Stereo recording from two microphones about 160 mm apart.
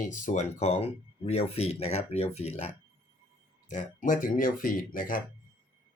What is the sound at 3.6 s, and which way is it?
Speech, 50° left (ahead or behind).